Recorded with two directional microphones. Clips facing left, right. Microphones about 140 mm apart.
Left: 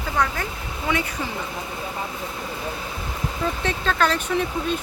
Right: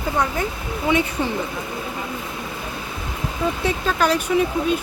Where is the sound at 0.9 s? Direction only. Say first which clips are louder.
Right 5 dB; 20° right (ahead or behind).